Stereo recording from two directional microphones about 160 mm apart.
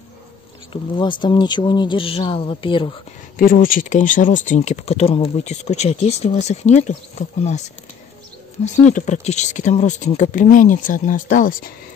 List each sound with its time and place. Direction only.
0.9 s speech: 30° left (ahead or behind)
3.3 s speech: 60° left (ahead or behind)
8.8 s speech: 50° left (ahead or behind)